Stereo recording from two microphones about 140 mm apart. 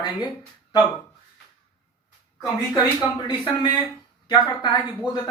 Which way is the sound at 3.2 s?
30° left (ahead or behind).